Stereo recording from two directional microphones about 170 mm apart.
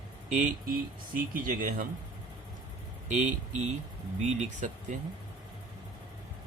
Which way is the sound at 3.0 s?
45° right (ahead or behind).